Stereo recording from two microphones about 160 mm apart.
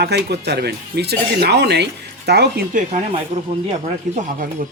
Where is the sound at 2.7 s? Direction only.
50° right (ahead or behind).